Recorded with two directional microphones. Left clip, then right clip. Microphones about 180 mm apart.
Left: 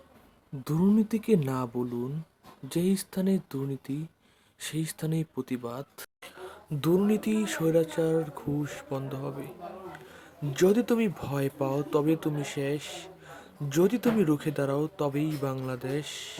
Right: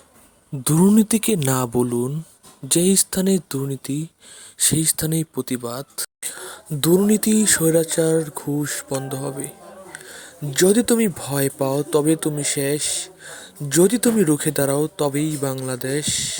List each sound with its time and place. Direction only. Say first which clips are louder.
0.6 s speech: right 10 dB; 50° right (ahead or behind); by 6.1 s 30° right (ahead or behind)
6.2 s speech: right 9 dB; 40° right (ahead or behind)